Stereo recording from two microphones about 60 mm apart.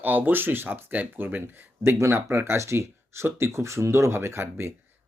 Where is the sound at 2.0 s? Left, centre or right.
Right.